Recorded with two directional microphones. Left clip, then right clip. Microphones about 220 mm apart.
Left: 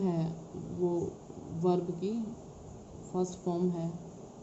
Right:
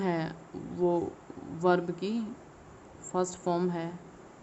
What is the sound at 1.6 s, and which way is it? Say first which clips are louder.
Speech: right 4 dB; 25° right (ahead or behind).